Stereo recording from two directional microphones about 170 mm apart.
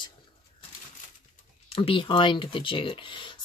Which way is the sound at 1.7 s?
30° left (ahead or behind).